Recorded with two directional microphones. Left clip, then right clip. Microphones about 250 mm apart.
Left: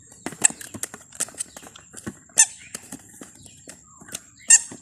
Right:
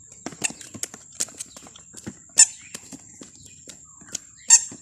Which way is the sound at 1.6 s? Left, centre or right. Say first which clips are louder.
Left 2 dB; centre.